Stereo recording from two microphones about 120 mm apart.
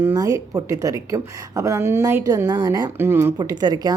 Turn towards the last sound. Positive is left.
turn(degrees=-35)  # may be behind; listen again after turning